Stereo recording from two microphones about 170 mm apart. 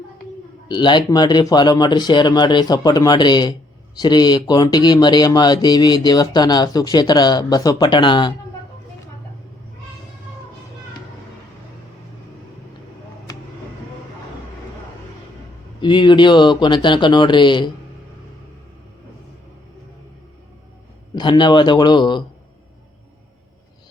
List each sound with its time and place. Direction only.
0.7 s speech: 25° left (ahead or behind)
15.8 s speech: 25° left (ahead or behind)
21.2 s speech: 25° left (ahead or behind)